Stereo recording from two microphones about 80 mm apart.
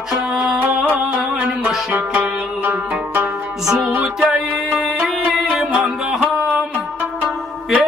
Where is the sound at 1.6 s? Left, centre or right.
Centre.